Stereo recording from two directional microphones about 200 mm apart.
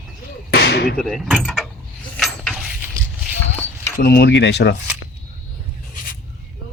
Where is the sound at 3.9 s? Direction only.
50° left (ahead or behind).